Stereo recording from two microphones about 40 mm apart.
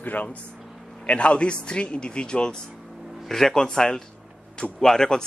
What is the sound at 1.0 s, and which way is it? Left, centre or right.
Speech, left.